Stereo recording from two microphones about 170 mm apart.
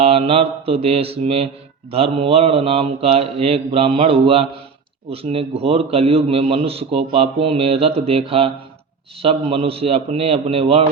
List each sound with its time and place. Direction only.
0.0 s a man's voice: 35° right (ahead or behind)